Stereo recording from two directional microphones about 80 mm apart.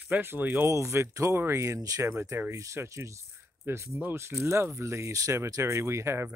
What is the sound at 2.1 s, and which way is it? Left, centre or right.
Speech, right.